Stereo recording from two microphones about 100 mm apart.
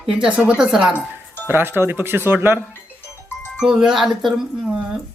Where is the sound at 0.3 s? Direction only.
10° right (ahead or behind).